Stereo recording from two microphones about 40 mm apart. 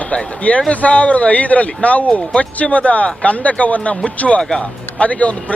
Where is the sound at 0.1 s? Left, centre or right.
Left.